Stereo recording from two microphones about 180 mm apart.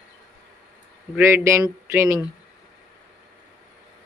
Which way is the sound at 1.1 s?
15° right (ahead or behind).